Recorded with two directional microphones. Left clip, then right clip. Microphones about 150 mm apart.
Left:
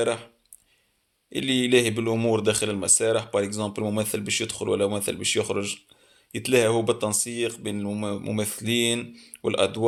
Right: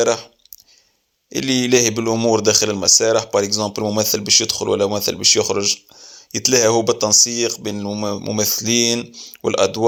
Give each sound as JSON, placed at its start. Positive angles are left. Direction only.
{"t": 0.0, "sound": "speech", "side_deg": -30}
{"t": 1.3, "sound": "speech", "side_deg": -30}